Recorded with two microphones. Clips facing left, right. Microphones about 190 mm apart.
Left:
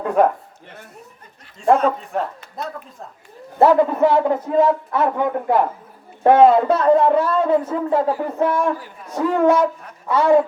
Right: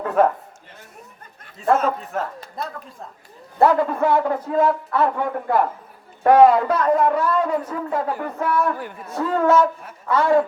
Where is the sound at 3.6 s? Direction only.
20° left (ahead or behind).